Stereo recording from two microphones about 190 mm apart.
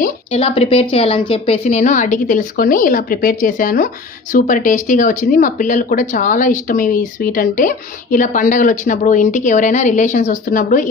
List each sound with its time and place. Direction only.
0.3 s a woman's voice: 30° left (ahead or behind)